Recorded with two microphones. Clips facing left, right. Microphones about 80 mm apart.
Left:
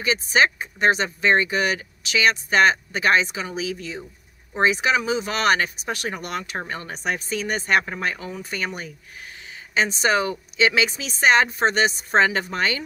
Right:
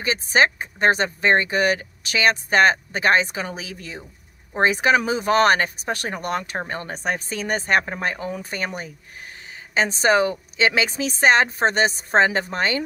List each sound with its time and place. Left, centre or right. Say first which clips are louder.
0.0 s speech: right 1 dB; right